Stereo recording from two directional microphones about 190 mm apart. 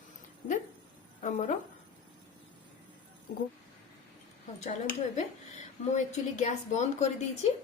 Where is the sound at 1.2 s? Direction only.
35° left (ahead or behind).